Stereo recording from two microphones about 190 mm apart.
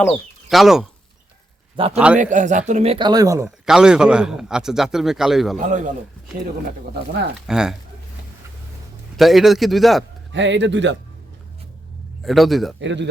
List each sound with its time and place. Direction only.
0.0 s a man's voice: centre (ahead or behind)
1.7 s a man's voice: 30° right (ahead or behind)
2.1 s speech: 40° right (ahead or behind); by 3.5 s 15° right (ahead or behind)
3.7 s a man's voice: 5° right (ahead or behind)
5.5 s speech: 40° right (ahead or behind)
7.4 s a man's voice: 5° right (ahead or behind)
9.1 s a man's voice: centre (ahead or behind)
10.3 s a man's voice: 75° right (ahead or behind)
12.2 s a man's voice: centre (ahead or behind)
12.8 s a man's voice: 70° right (ahead or behind)